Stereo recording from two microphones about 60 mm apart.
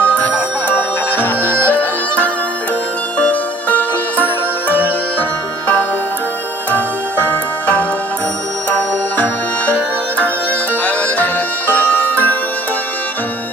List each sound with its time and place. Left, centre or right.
0.0 s music: left
10.2 s music: left